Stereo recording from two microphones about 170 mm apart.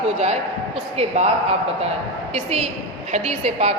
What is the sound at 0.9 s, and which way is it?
Speech, 40° right (ahead or behind).